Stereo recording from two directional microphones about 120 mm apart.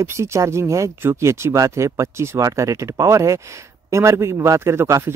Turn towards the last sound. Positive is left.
turn(degrees=-25)  # may be behind; listen again after turning